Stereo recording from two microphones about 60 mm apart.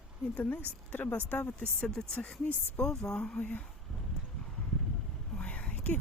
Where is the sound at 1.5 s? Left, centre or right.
Centre.